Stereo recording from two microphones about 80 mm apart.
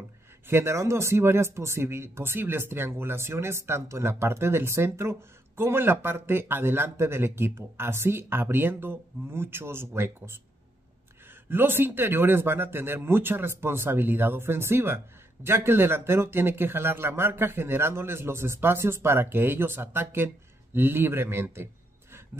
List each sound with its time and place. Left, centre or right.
0.5 s speech: right
11.4 s speech: right